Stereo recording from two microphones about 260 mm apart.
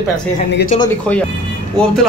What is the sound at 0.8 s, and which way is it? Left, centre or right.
Speech, centre.